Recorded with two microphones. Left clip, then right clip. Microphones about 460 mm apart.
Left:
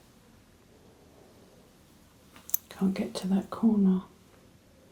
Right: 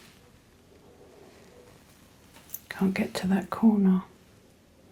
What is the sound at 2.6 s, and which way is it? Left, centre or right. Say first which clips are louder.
Speech: right 4 dB; right.